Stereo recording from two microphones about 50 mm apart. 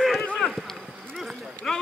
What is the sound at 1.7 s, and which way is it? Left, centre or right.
Run, centre.